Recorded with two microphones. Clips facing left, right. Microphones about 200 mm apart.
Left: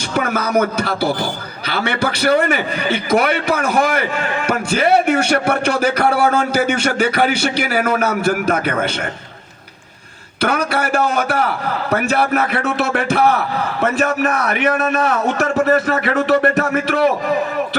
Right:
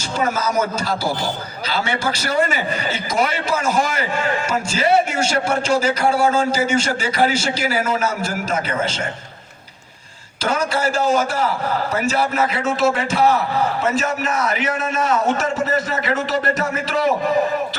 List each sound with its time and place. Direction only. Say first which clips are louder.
0.1 s a man's voice: left 3 dB; 60° left (ahead or behind)
10.4 s a man's voice: left 2 dB; 60° left (ahead or behind)